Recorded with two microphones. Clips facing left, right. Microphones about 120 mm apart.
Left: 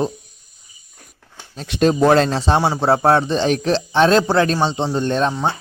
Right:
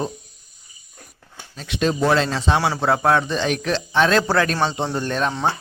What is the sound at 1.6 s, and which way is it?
Speech, 40° left (ahead or behind).